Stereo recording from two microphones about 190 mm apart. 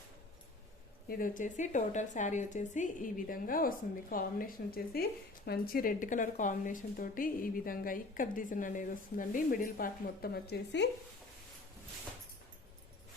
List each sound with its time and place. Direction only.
1.0 s speech: 50° left (ahead or behind)